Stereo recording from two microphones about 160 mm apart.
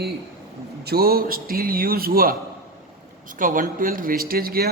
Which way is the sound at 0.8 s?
70° right (ahead or behind).